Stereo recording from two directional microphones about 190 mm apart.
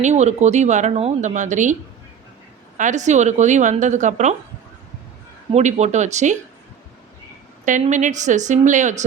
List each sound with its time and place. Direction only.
0.0 s a woman's voice: 35° right (ahead or behind)
2.7 s a woman's voice: 40° right (ahead or behind)
5.5 s a woman's voice: 35° right (ahead or behind)
7.6 s a woman's voice: 40° right (ahead or behind)